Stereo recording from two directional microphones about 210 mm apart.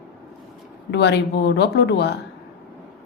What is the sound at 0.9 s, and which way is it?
A woman's voice, 55° left (ahead or behind).